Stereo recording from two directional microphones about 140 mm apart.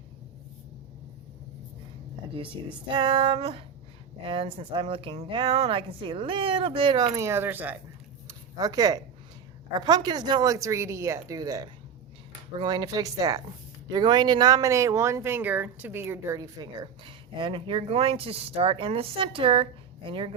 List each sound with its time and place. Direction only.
2.9 s speech: 35° right (ahead or behind); by 7.8 s 15° right (ahead or behind)
8.3 s a sound: 25° right (ahead or behind)
9.7 s speech: 30° right (ahead or behind)